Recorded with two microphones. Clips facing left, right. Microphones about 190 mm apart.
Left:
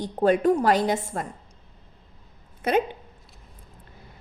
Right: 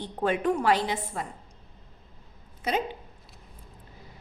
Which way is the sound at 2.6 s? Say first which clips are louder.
Left 6 dB; 55° left (ahead or behind).